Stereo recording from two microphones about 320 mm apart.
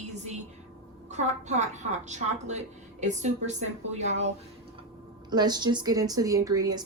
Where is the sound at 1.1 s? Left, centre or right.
Right.